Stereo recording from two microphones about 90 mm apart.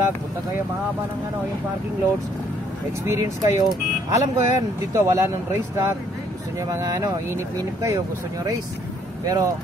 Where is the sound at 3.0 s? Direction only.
30° right (ahead or behind).